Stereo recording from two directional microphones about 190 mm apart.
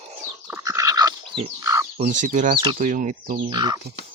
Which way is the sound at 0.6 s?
15° right (ahead or behind).